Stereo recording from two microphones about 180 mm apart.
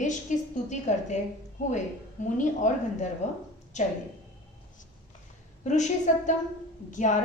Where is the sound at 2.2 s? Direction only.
45° left (ahead or behind).